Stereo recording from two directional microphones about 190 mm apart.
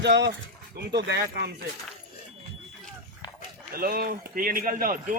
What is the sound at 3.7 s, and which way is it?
Speech, 50° right (ahead or behind).